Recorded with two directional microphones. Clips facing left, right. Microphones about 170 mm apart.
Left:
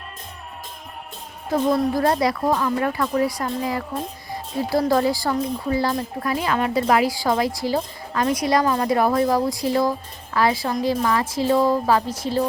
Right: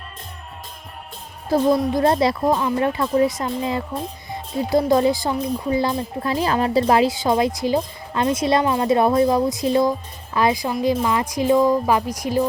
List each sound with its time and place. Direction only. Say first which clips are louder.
1.8 s a woman's voice: right 2 dB; 20° right (ahead or behind)
6.3 s a woman's voice: right 3 dB; 35° right (ahead or behind); by 12.4 s 15° right (ahead or behind)